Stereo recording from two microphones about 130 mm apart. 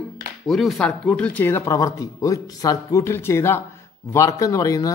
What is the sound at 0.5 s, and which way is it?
Speech, centre (ahead or behind).